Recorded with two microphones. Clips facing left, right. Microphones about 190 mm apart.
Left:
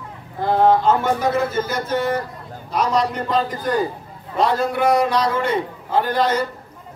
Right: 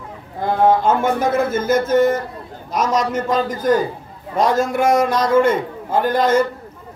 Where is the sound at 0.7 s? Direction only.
50° right (ahead or behind).